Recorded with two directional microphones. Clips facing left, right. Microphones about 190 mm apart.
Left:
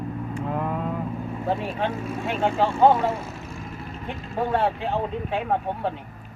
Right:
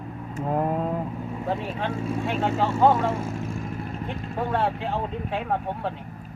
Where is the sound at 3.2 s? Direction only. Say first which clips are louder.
Right 5 dB; 50° right (ahead or behind).